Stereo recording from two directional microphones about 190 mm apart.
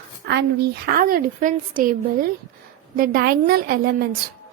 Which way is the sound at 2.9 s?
50° right (ahead or behind).